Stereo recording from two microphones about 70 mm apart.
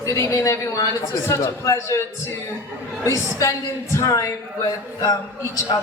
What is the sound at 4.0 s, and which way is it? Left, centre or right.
Speech, left.